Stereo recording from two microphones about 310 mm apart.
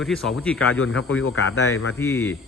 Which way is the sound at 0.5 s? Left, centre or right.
Left.